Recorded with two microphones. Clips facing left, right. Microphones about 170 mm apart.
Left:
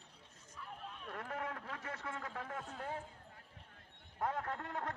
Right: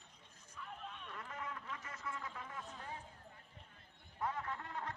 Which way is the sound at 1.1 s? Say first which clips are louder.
Left 6 dB; 60° left (ahead or behind).